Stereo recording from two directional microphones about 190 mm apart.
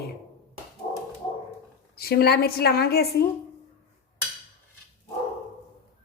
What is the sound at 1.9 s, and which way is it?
A woman's voice, 55° left (ahead or behind).